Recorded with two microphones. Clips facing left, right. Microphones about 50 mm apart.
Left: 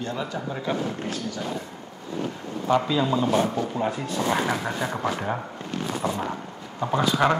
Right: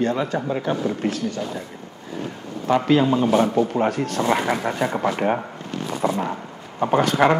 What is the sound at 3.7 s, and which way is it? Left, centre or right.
Speech, right.